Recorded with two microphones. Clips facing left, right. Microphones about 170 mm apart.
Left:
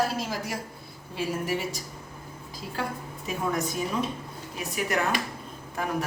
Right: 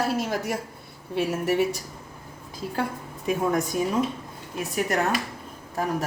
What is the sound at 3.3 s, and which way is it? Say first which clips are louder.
Speech: right 5 dB; 50° right (ahead or behind).